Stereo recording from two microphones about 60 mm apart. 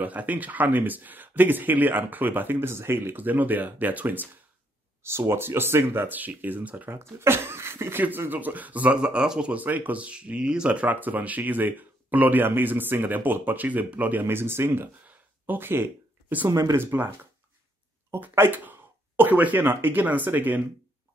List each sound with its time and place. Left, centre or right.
0.0 s speech: right
5.0 s speech: right
6.9 s speech: right
8.3 s speech: right
9.6 s speech: right
14.2 s speech: right
15.0 s a sound: right
16.4 s speech: right
16.7 s speech: right
18.3 s speech: right